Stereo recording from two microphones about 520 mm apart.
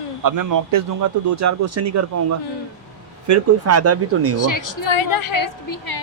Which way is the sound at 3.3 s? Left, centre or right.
Right.